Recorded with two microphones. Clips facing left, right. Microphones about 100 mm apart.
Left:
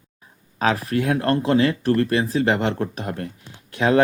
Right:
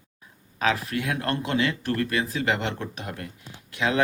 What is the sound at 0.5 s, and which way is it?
Speech, 40° left (ahead or behind).